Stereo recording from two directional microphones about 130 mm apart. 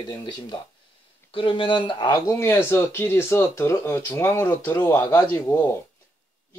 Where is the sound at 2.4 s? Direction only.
20° left (ahead or behind).